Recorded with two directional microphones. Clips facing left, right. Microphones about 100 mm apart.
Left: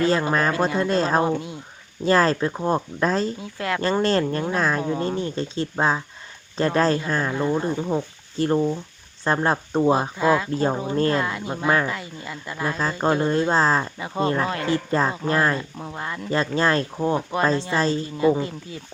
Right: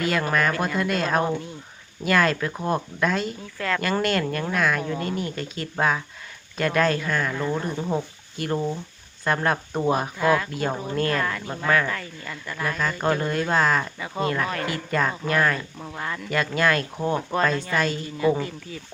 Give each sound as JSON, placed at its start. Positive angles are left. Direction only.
{"t": 0.0, "sound": "speech", "side_deg": 25}
{"t": 2.0, "sound": "speech", "side_deg": 30}
{"t": 3.4, "sound": "speech", "side_deg": 20}
{"t": 8.4, "sound": "speech", "side_deg": 30}